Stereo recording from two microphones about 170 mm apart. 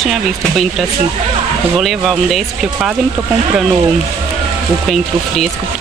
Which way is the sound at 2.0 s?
Centre (ahead or behind).